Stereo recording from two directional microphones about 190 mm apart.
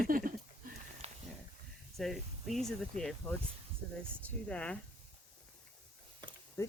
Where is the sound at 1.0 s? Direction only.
30° right (ahead or behind).